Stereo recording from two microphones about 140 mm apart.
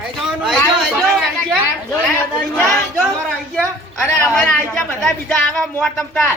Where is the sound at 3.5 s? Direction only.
15° left (ahead or behind).